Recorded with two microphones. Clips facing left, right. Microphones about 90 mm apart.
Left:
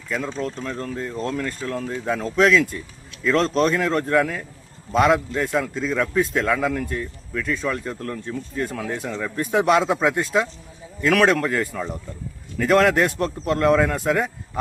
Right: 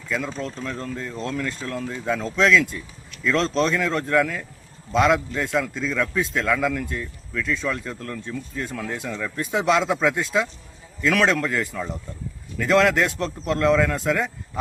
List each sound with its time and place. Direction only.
0.1 s speech: centre (ahead or behind)